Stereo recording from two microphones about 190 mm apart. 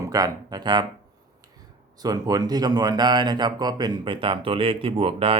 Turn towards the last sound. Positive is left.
turn(degrees=-30)  # may be behind; listen again after turning